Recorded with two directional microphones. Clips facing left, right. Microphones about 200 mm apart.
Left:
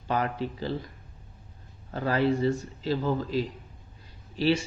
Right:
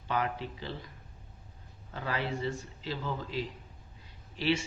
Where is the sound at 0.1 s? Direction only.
40° left (ahead or behind).